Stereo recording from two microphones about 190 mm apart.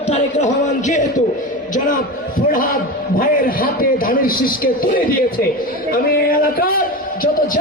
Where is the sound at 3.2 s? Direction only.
50° left (ahead or behind).